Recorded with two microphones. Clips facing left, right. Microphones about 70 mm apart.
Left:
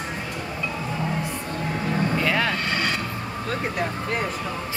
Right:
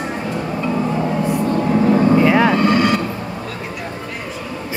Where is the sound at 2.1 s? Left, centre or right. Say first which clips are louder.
Right 10 dB; centre.